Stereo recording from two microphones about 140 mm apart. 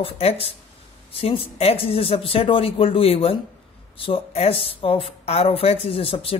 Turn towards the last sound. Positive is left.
turn(degrees=40)  # may be behind; listen again after turning